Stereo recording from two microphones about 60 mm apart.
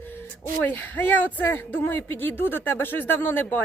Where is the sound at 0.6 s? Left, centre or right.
Left.